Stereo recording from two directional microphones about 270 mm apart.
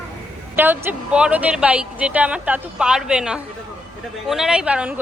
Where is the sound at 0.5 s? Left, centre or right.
Centre.